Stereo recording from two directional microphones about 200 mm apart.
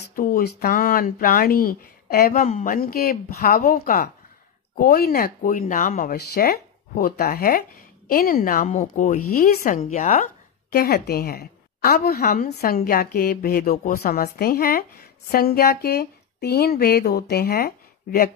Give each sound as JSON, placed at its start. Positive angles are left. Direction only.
{"t": 0.1, "sound": "speech", "side_deg": 45}